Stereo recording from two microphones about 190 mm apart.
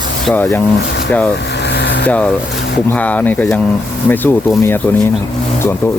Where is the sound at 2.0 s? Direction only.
5° left (ahead or behind).